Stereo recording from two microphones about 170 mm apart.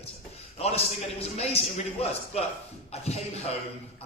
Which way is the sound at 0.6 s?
35° left (ahead or behind).